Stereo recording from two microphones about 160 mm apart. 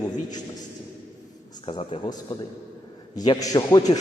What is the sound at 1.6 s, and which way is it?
Speech, 30° left (ahead or behind).